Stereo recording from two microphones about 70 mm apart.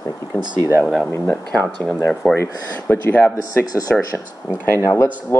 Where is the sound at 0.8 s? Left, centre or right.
Centre.